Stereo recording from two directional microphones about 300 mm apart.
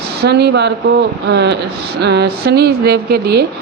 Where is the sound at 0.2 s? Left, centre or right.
Right.